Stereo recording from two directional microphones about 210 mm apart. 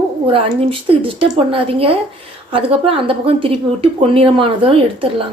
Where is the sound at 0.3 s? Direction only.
25° right (ahead or behind).